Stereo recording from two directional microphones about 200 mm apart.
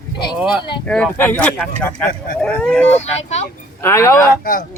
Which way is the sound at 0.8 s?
5° left (ahead or behind).